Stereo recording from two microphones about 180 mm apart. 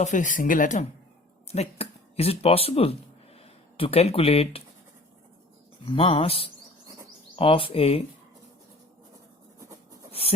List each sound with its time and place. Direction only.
0.0 s speech: 45° left (ahead or behind)
1.5 s speech: 35° left (ahead or behind)
5.8 s speech: 30° left (ahead or behind)
9.6 s writing: 20° right (ahead or behind)
10.1 s a sound: 30° left (ahead or behind)